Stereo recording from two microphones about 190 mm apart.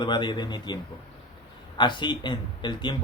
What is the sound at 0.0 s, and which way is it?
Speech, 25° left (ahead or behind).